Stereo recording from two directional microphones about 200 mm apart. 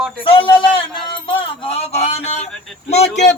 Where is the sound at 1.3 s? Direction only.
25° left (ahead or behind).